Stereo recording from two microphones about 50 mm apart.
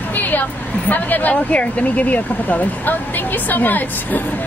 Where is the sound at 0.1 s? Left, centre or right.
Left.